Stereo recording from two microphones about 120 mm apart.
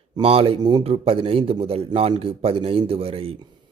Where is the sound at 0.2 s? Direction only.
50° right (ahead or behind).